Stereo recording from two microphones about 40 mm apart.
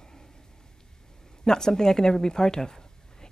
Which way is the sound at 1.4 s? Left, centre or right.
Centre.